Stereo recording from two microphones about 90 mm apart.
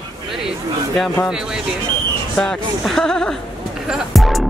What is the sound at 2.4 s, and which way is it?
A man's voice, 5° left (ahead or behind).